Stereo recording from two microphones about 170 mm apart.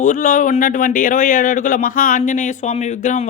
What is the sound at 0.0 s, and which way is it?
Speech, 55° left (ahead or behind).